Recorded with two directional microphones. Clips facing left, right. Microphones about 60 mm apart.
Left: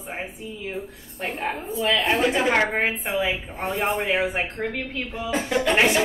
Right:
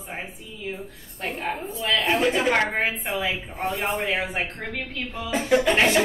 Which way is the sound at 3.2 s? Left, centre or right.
Centre.